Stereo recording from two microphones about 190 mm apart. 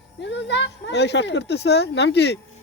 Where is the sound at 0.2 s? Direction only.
65° left (ahead or behind).